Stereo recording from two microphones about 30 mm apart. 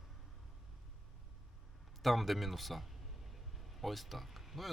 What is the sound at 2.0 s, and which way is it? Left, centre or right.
Speech, centre.